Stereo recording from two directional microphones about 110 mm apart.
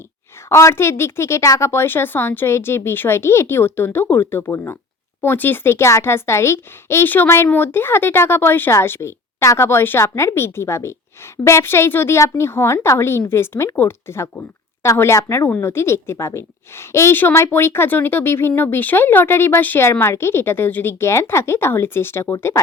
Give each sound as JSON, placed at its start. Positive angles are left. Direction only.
{"t": 0.4, "sound": "a woman's voice", "side_deg": 25}